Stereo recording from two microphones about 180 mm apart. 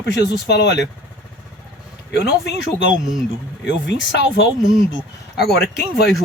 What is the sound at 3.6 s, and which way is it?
Speech, 85° left.